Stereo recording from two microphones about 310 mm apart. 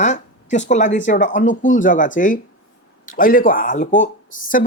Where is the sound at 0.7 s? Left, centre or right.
Left.